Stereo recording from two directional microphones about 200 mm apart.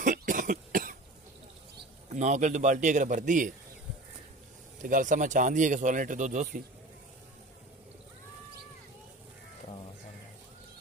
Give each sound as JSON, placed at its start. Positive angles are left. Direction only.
{"t": 0.0, "sound": "cough", "side_deg": -40}
{"t": 2.0, "sound": "speech", "side_deg": -35}
{"t": 4.8, "sound": "speech", "side_deg": -40}